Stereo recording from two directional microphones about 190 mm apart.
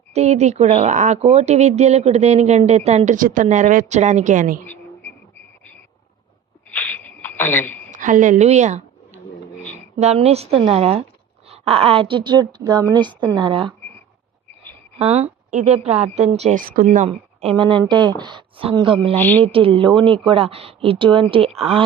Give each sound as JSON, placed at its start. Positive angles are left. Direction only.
{"t": 0.1, "sound": "speech", "side_deg": -35}
{"t": 4.6, "sound": "insect", "side_deg": 10}
{"t": 6.7, "sound": "a sound", "side_deg": 10}
{"t": 7.9, "sound": "a sound", "side_deg": -45}
{"t": 10.0, "sound": "speech", "side_deg": -35}
{"t": 14.9, "sound": "speech", "side_deg": -35}
{"t": 17.1, "sound": "speech", "side_deg": -25}
{"t": 19.2, "sound": "speech", "side_deg": 10}
{"t": 19.5, "sound": "speech", "side_deg": -30}